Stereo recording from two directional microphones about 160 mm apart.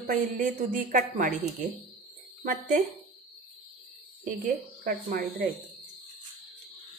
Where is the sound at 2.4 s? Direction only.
55° right (ahead or behind).